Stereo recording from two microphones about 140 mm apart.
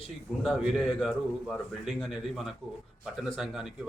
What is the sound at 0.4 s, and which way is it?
A man's voice, centre (ahead or behind).